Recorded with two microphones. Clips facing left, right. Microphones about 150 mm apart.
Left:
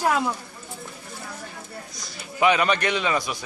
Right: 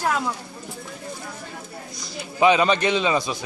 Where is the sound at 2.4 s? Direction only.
20° right (ahead or behind).